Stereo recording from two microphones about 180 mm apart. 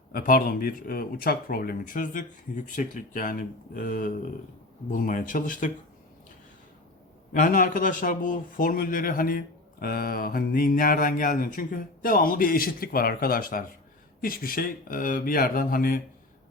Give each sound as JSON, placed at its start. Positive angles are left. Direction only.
{"t": 0.1, "sound": "speech", "side_deg": 50}
{"t": 7.3, "sound": "speech", "side_deg": 50}